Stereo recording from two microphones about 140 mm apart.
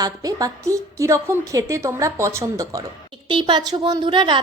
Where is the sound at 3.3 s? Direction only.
35° right (ahead or behind).